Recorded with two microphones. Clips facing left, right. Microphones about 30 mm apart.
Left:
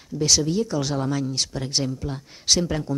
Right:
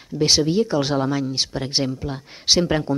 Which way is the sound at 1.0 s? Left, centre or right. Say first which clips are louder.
Right 3 dB; centre.